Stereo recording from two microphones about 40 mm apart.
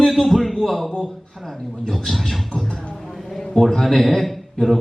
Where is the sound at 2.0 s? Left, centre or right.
Centre.